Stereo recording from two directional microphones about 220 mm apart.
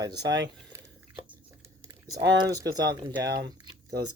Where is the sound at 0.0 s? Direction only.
15° right (ahead or behind).